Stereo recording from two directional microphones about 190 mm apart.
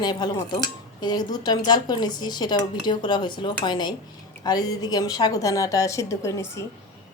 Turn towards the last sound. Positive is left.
turn(degrees=15)  # may be behind; listen again after turning